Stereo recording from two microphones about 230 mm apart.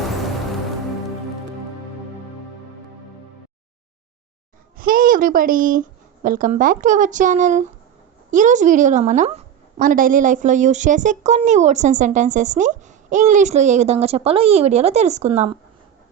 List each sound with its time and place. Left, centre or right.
4.8 s a woman's voice: right